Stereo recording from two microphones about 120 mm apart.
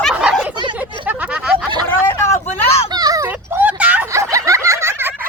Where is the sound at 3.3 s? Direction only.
15° right (ahead or behind).